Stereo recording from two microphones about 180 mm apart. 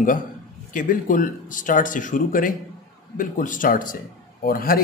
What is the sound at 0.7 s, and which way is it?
A man's voice, 50° left (ahead or behind).